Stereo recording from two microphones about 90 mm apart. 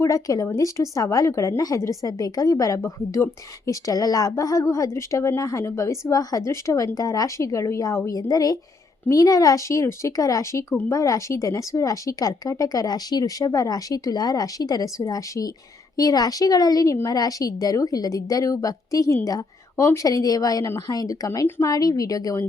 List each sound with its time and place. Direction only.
0.0 s speech: 40° left (ahead or behind)